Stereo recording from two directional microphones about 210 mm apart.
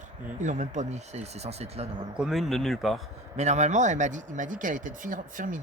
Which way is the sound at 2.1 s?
Centre (ahead or behind).